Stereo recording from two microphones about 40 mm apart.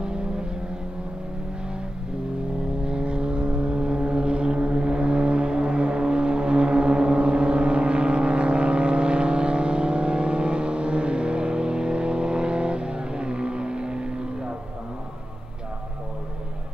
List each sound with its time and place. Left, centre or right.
0.0 s vehicle: right
2.8 s vehicle: right